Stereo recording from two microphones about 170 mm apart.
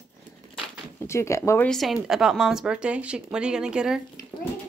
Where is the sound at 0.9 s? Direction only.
15° left (ahead or behind).